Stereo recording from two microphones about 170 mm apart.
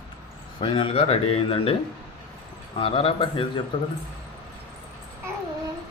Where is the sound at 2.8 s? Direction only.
35° left (ahead or behind).